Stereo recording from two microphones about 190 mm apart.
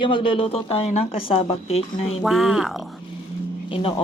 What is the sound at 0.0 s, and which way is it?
Speech, 25° left (ahead or behind).